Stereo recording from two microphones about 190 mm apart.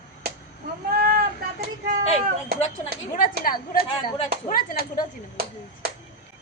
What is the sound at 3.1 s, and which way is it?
A woman's voice, 50° left (ahead or behind).